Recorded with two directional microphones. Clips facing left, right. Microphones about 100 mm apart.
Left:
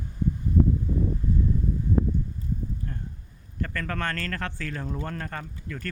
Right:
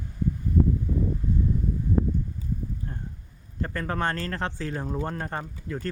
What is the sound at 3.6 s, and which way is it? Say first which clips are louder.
Speech: right 2 dB; 25° right (ahead or behind).